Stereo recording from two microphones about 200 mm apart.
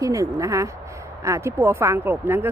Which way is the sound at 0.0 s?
15° right (ahead or behind).